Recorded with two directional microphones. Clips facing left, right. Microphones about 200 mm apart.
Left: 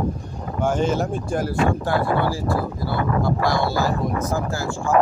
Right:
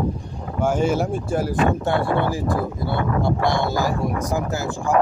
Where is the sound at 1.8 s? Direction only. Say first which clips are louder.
Even; 25° right (ahead or behind).